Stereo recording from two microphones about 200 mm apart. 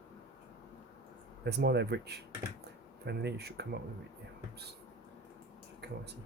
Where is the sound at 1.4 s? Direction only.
55° right (ahead or behind).